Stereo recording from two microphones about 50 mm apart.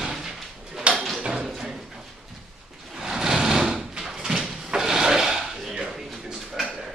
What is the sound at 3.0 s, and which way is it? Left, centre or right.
Sliding door, centre.